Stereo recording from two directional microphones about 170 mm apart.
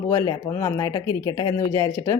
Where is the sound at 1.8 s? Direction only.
10° left (ahead or behind).